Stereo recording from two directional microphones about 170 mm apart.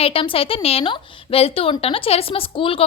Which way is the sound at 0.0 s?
35° left (ahead or behind).